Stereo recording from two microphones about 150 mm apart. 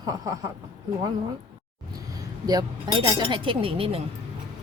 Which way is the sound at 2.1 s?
25° right (ahead or behind).